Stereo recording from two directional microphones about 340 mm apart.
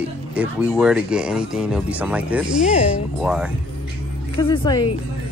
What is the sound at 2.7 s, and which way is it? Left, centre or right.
Speech, centre.